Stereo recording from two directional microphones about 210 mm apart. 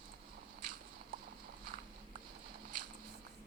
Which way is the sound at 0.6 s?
45° right (ahead or behind).